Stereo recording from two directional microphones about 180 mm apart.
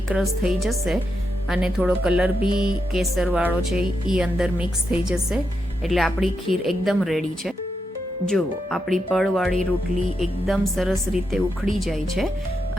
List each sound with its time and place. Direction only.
0.1 s speech: centre (ahead or behind)